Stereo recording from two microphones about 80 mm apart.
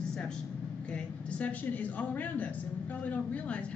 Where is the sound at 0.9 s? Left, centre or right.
Centre.